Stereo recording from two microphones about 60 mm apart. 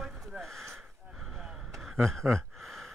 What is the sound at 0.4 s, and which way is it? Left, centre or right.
Speech, centre.